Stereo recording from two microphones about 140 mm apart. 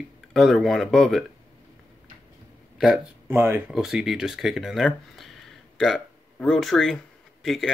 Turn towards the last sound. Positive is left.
turn(degrees=0)  # may be behind; listen again after turning